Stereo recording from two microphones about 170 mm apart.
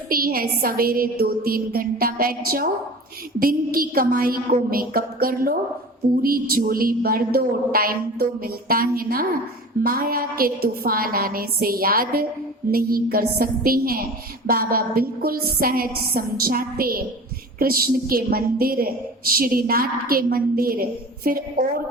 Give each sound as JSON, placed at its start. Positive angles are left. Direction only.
{"t": 0.1, "sound": "a woman's voice", "side_deg": -60}